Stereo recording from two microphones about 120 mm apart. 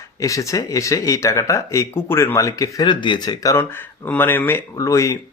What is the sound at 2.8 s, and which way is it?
Speech, 40° left (ahead or behind).